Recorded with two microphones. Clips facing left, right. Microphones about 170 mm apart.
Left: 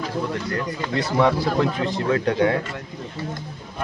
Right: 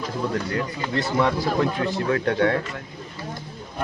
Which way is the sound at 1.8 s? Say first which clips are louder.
Left 1 dB; 20° left (ahead or behind).